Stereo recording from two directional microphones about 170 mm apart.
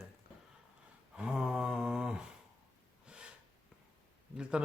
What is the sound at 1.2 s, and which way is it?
Speech, 5° right (ahead or behind).